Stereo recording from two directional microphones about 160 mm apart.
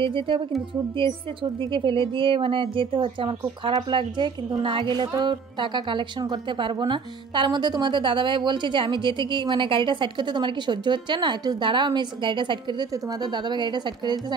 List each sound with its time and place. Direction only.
0.0 s speech: 30° right (ahead or behind)
1.6 s speech: 30° right (ahead or behind)